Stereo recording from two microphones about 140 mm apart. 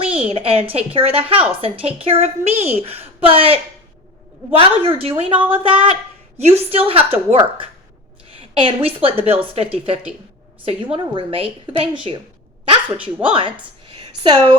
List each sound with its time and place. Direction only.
0.2 s a woman's voice: 45° right (ahead or behind)
5.4 s speech: 10° right (ahead or behind)
5.6 s a woman's voice: 40° right (ahead or behind)
13.2 s speech: 35° right (ahead or behind)
13.8 s a sound: 35° right (ahead or behind)